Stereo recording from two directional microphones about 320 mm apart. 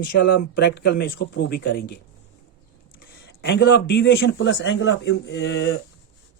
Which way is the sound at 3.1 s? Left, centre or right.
Left.